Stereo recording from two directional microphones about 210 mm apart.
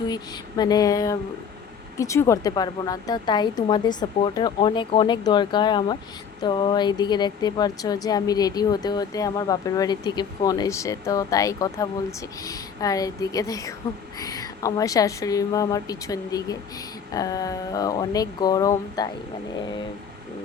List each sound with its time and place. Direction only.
0.1 s a woman's voice: 20° left (ahead or behind)